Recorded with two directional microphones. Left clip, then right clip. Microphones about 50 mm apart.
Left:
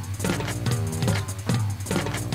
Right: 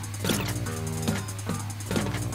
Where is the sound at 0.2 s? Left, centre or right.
Left.